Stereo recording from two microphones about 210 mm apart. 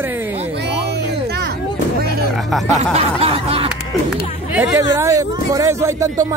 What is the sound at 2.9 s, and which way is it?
Snicker, 30° right (ahead or behind).